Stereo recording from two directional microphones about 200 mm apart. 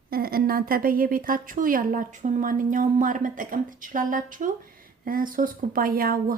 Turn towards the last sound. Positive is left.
turn(degrees=-45)  # may be behind; listen again after turning